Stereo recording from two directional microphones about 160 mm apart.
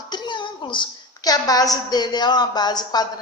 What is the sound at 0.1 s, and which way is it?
A woman's voice, 30° left (ahead or behind).